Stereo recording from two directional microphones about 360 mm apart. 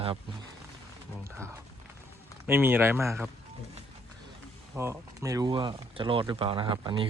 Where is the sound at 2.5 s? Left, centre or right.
Centre.